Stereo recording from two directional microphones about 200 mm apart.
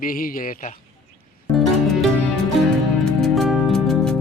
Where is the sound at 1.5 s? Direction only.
Centre (ahead or behind).